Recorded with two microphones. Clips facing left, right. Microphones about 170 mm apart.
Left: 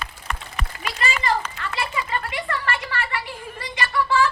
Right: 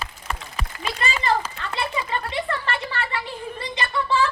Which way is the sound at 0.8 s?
25° right (ahead or behind).